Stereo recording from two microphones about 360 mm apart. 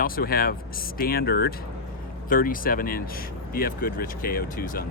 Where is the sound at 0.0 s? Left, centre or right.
Left.